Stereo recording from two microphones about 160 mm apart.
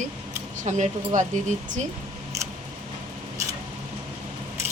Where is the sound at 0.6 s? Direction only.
50° right (ahead or behind).